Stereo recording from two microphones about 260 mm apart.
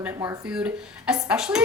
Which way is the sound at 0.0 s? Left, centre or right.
Centre.